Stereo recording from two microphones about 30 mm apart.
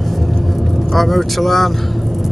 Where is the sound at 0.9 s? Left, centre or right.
Centre.